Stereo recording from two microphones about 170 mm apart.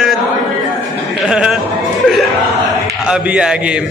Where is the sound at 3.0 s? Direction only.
5° right (ahead or behind).